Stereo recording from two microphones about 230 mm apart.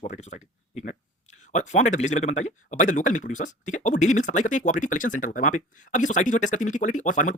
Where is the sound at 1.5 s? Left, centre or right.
Left.